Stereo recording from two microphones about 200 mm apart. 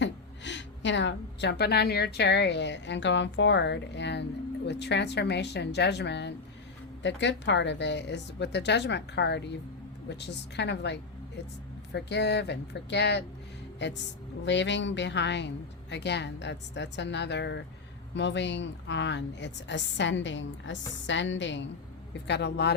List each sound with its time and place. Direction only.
0.0 s a woman's voice: 65° left (ahead or behind)